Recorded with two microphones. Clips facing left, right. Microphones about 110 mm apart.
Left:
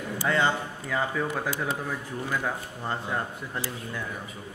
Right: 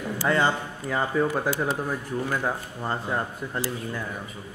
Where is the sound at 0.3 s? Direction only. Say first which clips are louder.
Right 2 dB; 35° right (ahead or behind).